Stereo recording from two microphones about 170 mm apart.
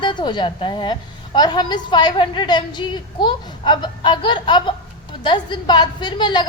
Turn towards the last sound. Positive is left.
turn(degrees=25)  # may be behind; listen again after turning